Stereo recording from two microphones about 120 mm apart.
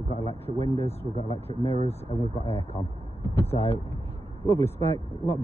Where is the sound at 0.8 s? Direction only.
55° left (ahead or behind).